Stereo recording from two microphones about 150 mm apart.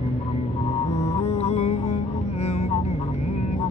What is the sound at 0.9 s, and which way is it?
Music, 45° left (ahead or behind).